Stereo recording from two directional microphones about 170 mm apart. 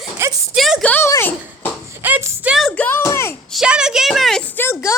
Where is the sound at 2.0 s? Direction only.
10° right (ahead or behind).